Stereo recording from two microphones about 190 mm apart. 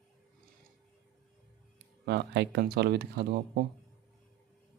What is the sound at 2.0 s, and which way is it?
Speech, 65° right (ahead or behind).